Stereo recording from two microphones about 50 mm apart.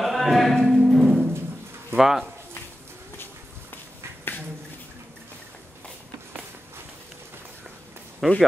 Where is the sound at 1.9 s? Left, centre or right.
Centre.